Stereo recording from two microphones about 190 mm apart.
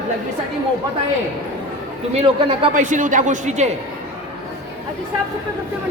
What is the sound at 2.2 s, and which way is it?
Speech, 30° right (ahead or behind).